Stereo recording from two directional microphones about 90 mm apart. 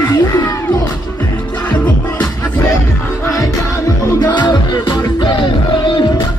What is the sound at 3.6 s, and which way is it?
Music, 35° left (ahead or behind).